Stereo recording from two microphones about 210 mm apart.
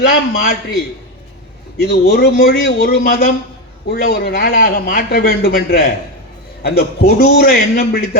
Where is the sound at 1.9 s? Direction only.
45° left (ahead or behind).